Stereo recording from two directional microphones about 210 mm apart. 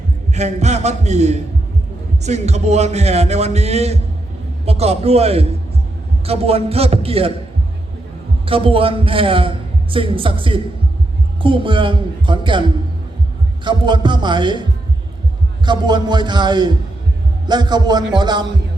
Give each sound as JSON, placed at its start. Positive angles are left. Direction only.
{"t": 0.3, "sound": "a man's voice", "side_deg": -30}
{"t": 8.4, "sound": "a man's voice", "side_deg": -25}
{"t": 15.6, "sound": "a man's voice", "side_deg": -20}